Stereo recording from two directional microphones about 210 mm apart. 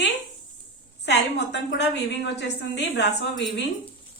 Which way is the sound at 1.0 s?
55° left (ahead or behind).